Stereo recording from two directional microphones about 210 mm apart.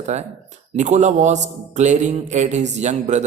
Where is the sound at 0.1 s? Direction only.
35° right (ahead or behind).